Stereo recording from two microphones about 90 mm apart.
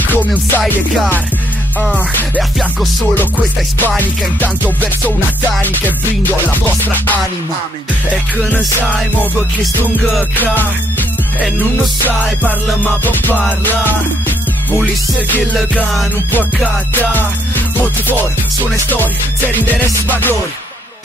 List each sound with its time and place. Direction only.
0.0 s music: 20° left (ahead or behind)
3.8 s music: 20° left (ahead or behind)
10.3 s music: 20° left (ahead or behind)
12.8 s music: 20° left (ahead or behind)
15.8 s music: centre (ahead or behind)
19.6 s music: 20° left (ahead or behind)